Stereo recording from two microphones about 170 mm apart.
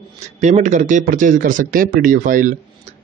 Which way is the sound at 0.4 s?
45° right (ahead or behind).